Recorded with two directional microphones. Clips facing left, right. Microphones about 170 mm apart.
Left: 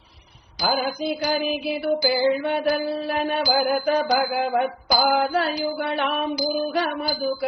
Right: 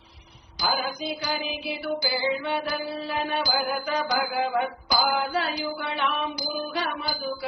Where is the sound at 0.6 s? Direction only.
50° left (ahead or behind).